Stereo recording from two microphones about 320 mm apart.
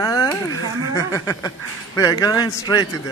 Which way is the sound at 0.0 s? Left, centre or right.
Centre.